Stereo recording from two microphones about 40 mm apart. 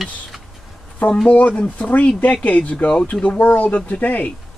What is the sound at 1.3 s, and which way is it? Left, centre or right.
Speech, left.